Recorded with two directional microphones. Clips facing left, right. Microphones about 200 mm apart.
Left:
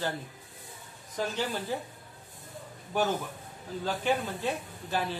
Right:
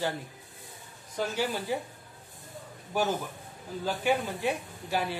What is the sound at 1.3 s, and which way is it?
Speech, 10° right (ahead or behind).